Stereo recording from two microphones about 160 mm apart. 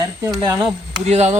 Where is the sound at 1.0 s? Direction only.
40° right (ahead or behind).